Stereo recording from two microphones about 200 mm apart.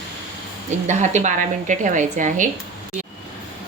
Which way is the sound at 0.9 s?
35° right (ahead or behind).